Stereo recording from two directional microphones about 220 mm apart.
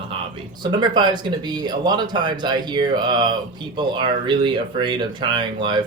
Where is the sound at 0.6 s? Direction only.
20° right (ahead or behind).